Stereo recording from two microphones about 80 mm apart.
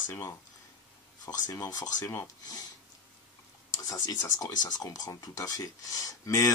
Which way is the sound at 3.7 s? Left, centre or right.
Left.